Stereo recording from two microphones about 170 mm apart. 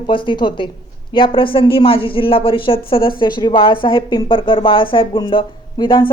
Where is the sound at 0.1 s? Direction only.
30° left (ahead or behind).